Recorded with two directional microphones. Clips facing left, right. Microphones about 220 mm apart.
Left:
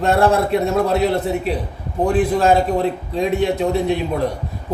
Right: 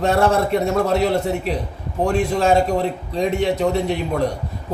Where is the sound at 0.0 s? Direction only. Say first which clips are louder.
Left 1 dB; centre (ahead or behind).